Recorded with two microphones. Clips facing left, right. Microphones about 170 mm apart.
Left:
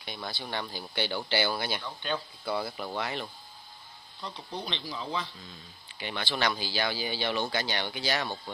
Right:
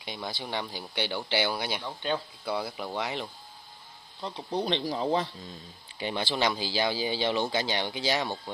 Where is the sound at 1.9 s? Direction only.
25° right (ahead or behind).